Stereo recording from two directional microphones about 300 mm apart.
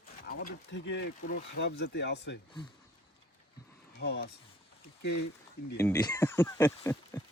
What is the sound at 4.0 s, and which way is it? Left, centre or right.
Speech, left.